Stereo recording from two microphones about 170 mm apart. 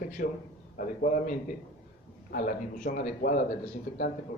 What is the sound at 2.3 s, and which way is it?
A man's voice, 55° left (ahead or behind).